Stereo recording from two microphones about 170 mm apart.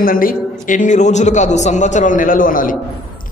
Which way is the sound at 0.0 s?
55° left (ahead or behind).